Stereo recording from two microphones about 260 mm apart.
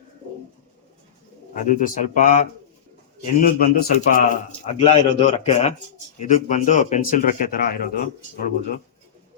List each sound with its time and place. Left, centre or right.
1.5 s speech: left
3.4 s a man's voice: left